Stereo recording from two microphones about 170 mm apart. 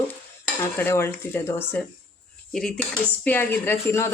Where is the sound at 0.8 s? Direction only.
15° left (ahead or behind).